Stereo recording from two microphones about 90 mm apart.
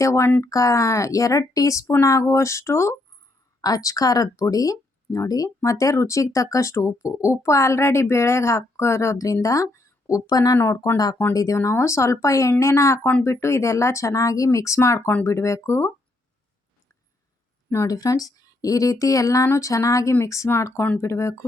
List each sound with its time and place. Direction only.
0.0 s speech: 35° left (ahead or behind)
10.6 s speech: 30° left (ahead or behind)
17.8 s speech: 40° left (ahead or behind)